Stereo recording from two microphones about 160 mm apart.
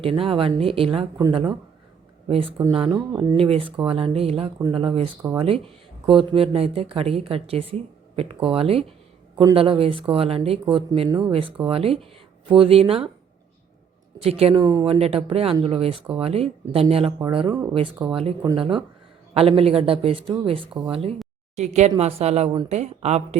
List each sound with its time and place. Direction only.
0.0 s speech: 35° right (ahead or behind)
2.2 s speech: 35° right (ahead or behind)
3.1 s speech: 20° right (ahead or behind)
3.3 s speech: 35° right (ahead or behind)
14.2 s speech: 40° right (ahead or behind)
14.5 s speech: 25° right (ahead or behind)
14.9 s speech: 40° right (ahead or behind)
17.5 s speech: 20° right (ahead or behind)
18.1 s speech: 35° right (ahead or behind)